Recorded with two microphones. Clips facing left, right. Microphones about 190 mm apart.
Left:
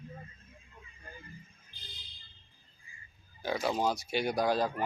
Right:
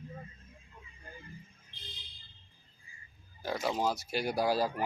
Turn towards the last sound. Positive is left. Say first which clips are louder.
# even
turn(degrees=-5)  # may be behind; listen again after turning